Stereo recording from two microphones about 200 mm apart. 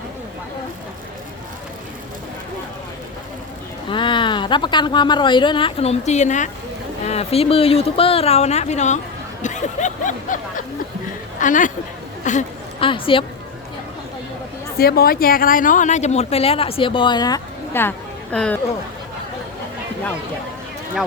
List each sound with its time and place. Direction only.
3.8 s a woman's voice: 25° left (ahead or behind)
12.8 s speech: 25° left (ahead or behind)
14.8 s speech: 50° left (ahead or behind); by 18.6 s 5° left (ahead or behind)